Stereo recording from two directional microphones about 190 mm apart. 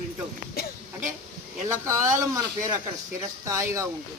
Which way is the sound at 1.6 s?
15° right (ahead or behind).